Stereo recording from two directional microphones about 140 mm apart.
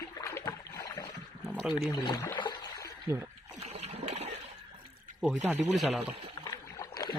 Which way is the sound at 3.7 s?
50° right (ahead or behind).